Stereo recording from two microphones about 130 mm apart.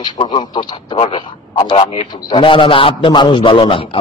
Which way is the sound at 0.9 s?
50° left (ahead or behind).